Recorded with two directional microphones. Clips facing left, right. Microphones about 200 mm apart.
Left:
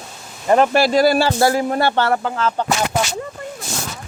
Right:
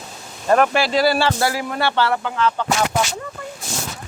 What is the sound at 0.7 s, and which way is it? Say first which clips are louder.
Speech: left 4 dB; 45° left (ahead or behind).